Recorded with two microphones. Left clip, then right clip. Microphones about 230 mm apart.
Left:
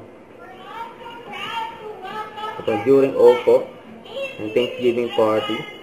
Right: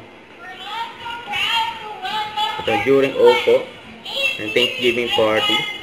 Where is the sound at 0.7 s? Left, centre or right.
Centre.